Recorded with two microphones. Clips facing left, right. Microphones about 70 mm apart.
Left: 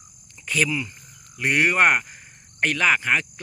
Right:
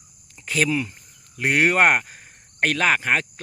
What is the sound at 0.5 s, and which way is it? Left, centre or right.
Speech, right.